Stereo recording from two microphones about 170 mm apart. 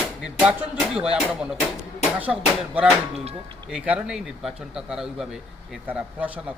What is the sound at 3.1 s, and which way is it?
Speech, 35° right (ahead or behind).